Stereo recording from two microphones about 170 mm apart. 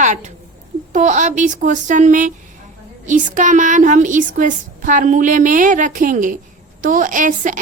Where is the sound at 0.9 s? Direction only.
45° right (ahead or behind).